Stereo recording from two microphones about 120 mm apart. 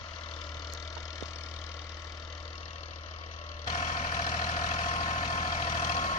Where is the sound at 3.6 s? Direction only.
90° left.